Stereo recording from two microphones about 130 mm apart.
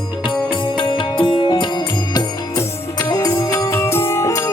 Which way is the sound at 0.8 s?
40° left (ahead or behind).